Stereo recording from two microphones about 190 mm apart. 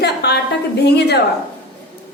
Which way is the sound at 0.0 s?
60° left (ahead or behind).